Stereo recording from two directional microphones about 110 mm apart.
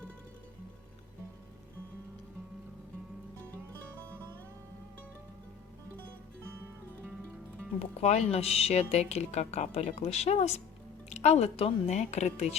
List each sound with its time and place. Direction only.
7.8 s speech: 80° left